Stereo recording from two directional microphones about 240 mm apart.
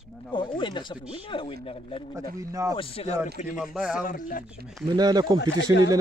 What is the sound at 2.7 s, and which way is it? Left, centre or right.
Speech, left.